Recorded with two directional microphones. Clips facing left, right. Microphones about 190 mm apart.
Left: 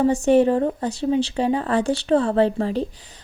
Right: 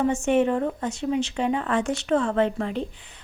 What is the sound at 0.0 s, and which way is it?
Speech, 35° left (ahead or behind).